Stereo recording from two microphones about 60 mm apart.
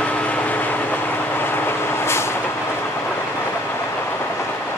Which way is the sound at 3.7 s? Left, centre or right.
Left.